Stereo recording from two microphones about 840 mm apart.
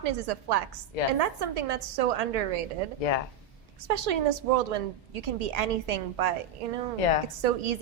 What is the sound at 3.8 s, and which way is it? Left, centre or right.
A woman's voice, right.